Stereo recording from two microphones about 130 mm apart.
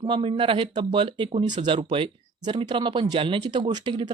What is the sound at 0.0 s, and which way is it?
Speech, 40° right (ahead or behind).